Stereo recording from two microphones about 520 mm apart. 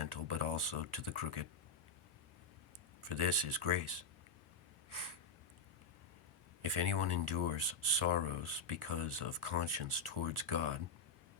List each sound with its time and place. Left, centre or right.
0.0 s speech: right
3.0 s speech: right
4.9 s snort: right
6.6 s speech: right